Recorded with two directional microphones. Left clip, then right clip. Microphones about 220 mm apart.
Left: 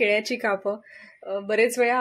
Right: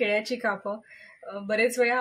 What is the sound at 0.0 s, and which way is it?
Speech, 40° left (ahead or behind).